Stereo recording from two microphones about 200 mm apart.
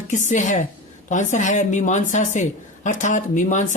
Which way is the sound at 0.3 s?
35° left (ahead or behind).